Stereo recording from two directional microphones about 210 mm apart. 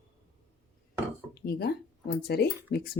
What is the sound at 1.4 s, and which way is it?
Speech, 50° left (ahead or behind).